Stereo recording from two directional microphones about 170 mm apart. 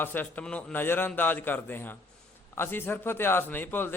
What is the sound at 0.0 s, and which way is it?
A man's voice, 10° left (ahead or behind).